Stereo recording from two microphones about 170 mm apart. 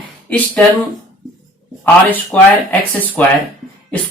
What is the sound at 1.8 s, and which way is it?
Speech, 10° left (ahead or behind).